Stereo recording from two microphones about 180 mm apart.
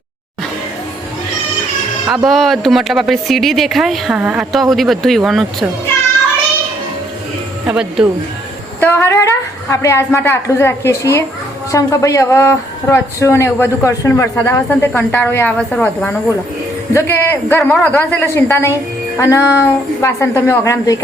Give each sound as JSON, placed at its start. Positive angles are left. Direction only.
{"t": 2.0, "sound": "speech", "side_deg": 0}
{"t": 7.7, "sound": "speech", "side_deg": -5}
{"t": 8.8, "sound": "speech", "side_deg": 15}